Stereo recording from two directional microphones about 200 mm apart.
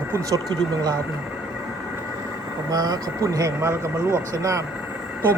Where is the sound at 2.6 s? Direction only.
20° right (ahead or behind).